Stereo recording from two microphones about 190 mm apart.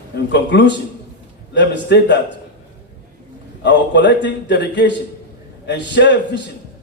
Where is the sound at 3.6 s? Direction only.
65° left (ahead or behind).